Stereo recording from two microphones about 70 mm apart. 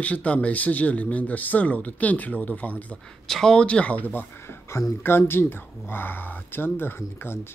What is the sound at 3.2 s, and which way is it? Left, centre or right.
Speech, centre.